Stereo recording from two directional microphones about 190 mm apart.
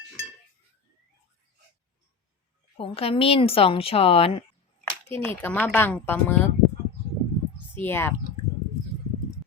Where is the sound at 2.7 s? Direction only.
30° left (ahead or behind).